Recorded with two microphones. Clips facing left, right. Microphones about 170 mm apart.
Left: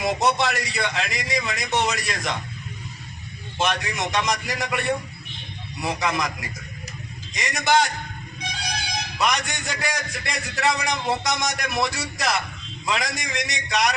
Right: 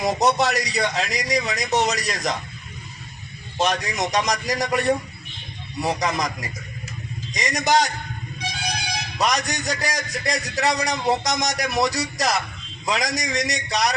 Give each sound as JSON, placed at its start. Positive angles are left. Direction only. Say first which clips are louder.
{"t": 0.0, "sound": "a man's voice", "louder": "right 2 dB", "side_deg": -40}
{"t": 3.6, "sound": "a man's voice", "louder": "right 2 dB", "side_deg": -35}
{"t": 7.3, "sound": "a man's voice", "louder": "right 1 dB", "side_deg": -40}
{"t": 9.1, "sound": "a man's voice", "louder": "right 2 dB", "side_deg": -40}